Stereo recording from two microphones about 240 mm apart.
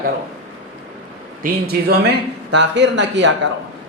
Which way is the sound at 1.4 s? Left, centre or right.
Right.